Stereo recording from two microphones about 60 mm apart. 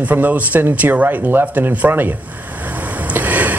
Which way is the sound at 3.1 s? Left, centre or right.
Right.